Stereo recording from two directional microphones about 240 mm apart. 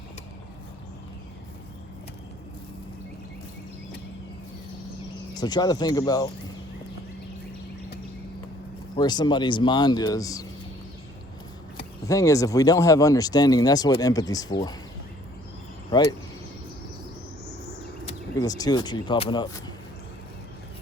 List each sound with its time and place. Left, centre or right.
5.3 s speech: centre
9.0 s speech: centre
12.0 s speech: centre
15.9 s speech: centre
18.3 s speech: centre